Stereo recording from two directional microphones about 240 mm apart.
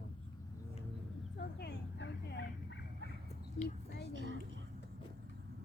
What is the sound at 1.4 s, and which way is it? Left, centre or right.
Dog, left.